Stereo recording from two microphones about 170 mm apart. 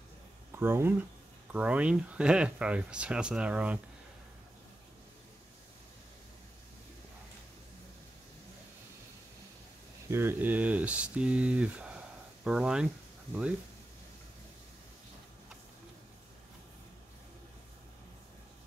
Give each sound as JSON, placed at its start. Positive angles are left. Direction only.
{"t": 0.5, "sound": "speech", "side_deg": -15}
{"t": 10.0, "sound": "speech", "side_deg": -15}